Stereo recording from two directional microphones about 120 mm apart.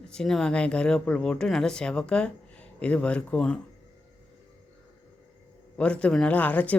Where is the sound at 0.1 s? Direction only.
5° left (ahead or behind).